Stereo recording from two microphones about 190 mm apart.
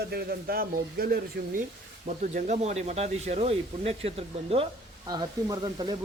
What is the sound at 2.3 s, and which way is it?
Speech, 35° right (ahead or behind).